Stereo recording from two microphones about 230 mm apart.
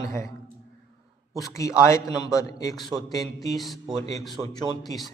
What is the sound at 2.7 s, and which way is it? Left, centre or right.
A man's voice, centre.